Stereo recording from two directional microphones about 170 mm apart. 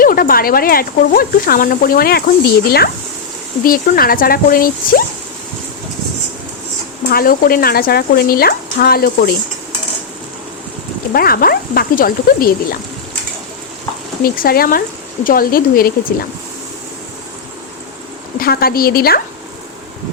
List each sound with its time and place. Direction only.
0.0 s speech: 60° left (ahead or behind)
7.1 s speech: 60° left (ahead or behind)
11.1 s speech: 60° left (ahead or behind)
14.2 s speech: 60° left (ahead or behind)
18.3 s speech: 60° left (ahead or behind)